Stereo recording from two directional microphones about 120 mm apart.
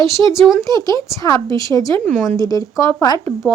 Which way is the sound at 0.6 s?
30° left (ahead or behind).